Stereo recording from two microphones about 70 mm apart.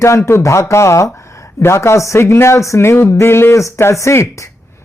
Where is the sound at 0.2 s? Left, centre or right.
Left.